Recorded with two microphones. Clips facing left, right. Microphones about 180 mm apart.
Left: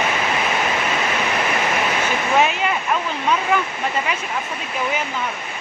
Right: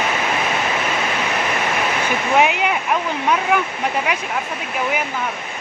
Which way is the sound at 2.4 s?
15° right (ahead or behind).